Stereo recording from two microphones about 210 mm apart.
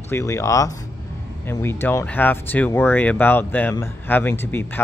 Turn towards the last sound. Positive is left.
turn(degrees=10)  # may be behind; listen again after turning